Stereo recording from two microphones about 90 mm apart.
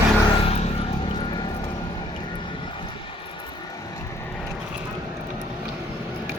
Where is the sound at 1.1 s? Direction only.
70° left (ahead or behind).